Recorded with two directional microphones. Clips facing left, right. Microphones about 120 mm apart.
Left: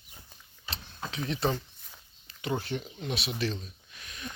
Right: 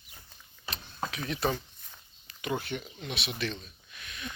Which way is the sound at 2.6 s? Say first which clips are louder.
Left 2 dB; 35° left (ahead or behind).